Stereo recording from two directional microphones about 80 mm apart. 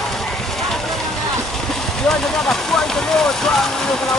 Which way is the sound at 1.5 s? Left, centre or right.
Centre.